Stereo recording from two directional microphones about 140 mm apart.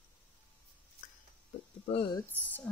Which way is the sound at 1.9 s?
40° left (ahead or behind).